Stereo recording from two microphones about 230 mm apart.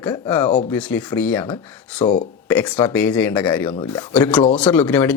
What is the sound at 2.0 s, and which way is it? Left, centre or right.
Speech, left.